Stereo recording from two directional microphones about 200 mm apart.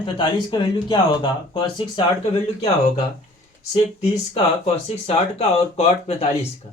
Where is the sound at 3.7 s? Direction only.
30° left (ahead or behind).